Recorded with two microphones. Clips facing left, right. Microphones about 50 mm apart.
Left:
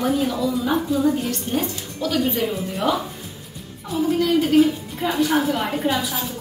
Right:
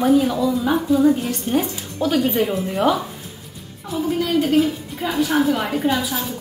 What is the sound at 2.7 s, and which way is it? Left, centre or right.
A woman's voice, centre.